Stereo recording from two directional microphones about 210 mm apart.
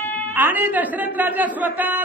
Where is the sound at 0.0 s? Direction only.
10° left (ahead or behind).